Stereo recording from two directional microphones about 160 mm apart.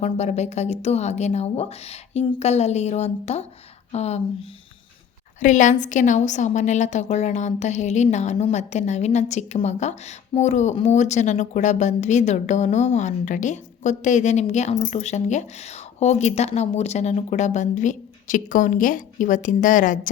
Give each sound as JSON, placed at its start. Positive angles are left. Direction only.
{"t": 0.0, "sound": "a woman's voice", "side_deg": 45}